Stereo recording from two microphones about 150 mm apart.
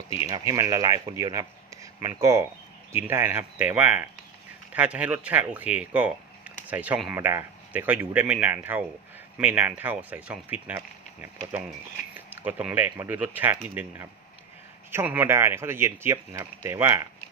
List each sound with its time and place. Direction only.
0.3 s speech: 25° right (ahead or behind)